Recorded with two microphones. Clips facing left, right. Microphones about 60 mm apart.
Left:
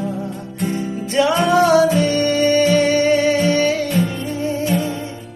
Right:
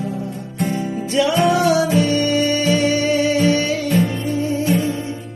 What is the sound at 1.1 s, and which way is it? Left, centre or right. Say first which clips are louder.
Music: left 1 dB; left.